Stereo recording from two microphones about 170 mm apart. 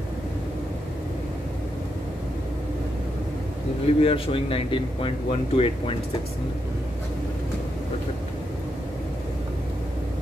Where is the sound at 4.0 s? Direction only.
35° left (ahead or behind).